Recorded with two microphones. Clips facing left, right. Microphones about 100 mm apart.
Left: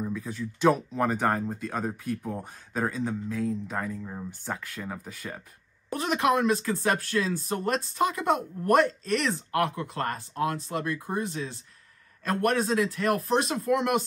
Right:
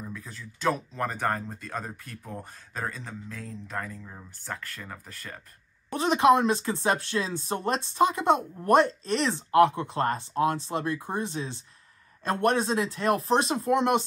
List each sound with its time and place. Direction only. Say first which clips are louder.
0.0 s speech: left 8 dB; 5° left (ahead or behind)
5.9 s speech: right 4 dB; 30° right (ahead or behind)